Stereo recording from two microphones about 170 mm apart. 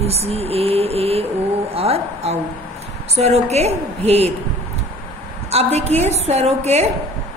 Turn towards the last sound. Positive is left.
turn(degrees=-40)  # may be behind; listen again after turning